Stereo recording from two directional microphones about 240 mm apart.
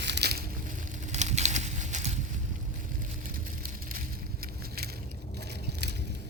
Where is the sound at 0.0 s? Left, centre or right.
Right.